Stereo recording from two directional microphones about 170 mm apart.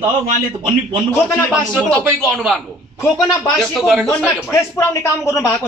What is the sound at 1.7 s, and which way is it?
Speech, 5° left (ahead or behind).